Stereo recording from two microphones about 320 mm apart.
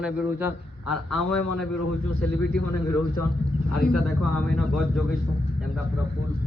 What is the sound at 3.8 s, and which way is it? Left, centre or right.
Speech, centre.